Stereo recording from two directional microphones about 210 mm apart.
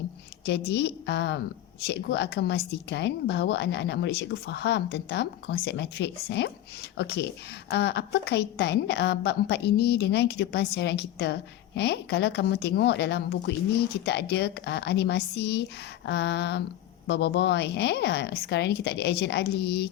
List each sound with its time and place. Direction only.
0.4 s a woman's voice: 55° left (ahead or behind)